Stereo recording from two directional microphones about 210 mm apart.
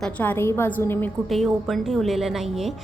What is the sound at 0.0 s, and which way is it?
A woman's voice, 10° left (ahead or behind).